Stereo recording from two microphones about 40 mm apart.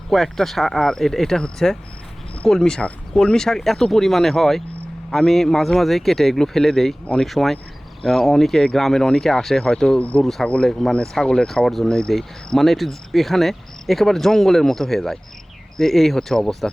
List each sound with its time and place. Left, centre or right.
0.1 s speech: centre
10.0 s speech: left
10.7 s speech: centre
11.4 s speech: centre